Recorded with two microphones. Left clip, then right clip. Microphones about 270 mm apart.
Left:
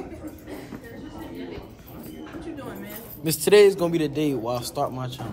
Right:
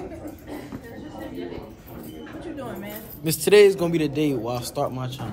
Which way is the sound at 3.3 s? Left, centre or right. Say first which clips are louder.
Right 1 dB; centre.